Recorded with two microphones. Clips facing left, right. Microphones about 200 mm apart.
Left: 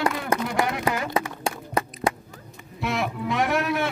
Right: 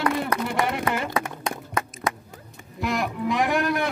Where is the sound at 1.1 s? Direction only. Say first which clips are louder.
Left 1 dB; 30° left (ahead or behind).